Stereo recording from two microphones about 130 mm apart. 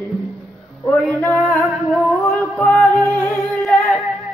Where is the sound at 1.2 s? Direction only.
15° left (ahead or behind).